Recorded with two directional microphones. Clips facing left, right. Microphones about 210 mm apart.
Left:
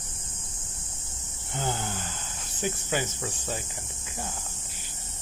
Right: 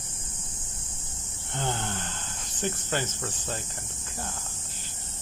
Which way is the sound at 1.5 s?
5° left (ahead or behind).